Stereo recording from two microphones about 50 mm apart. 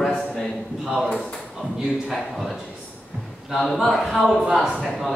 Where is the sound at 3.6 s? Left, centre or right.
Centre.